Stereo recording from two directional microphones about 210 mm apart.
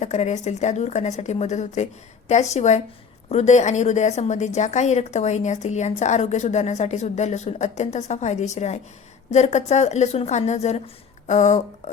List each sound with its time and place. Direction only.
0.0 s a woman's voice: 35° left (ahead or behind)